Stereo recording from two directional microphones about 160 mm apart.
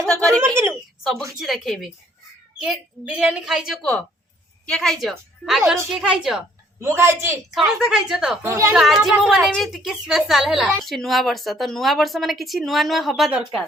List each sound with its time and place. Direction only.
0.0 s a sound: 5° left (ahead or behind)
1.4 s a woman's voice: centre (ahead or behind)
6.7 s a woman's voice: 15° right (ahead or behind)
7.5 s a woman's voice: centre (ahead or behind)
8.4 s a woman's voice: 20° right (ahead or behind)
8.7 s a woman's voice: centre (ahead or behind)